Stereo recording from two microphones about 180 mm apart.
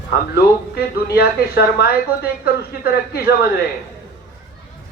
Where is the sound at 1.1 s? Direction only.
60° left (ahead or behind).